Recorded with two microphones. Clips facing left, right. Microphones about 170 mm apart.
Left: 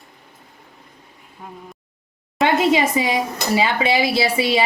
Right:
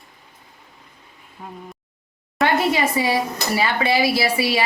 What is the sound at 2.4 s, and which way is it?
Speech, 20° left (ahead or behind).